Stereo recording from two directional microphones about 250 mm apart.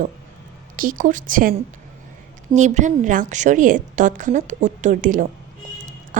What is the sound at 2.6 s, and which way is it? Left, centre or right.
A woman's voice, right.